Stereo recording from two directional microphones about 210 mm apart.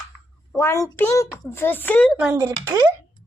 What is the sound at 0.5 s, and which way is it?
A child's voice, 15° left (ahead or behind).